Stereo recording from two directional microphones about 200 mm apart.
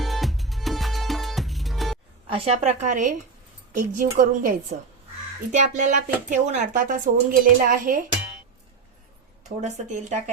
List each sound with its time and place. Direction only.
0.0 s music: centre (ahead or behind)
2.3 s speech: 30° right (ahead or behind)
9.6 s speech: 35° right (ahead or behind)